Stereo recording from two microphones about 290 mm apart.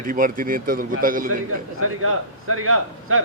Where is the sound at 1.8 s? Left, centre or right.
Right.